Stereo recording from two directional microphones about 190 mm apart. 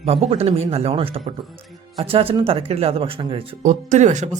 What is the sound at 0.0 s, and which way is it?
Speech, 35° right (ahead or behind).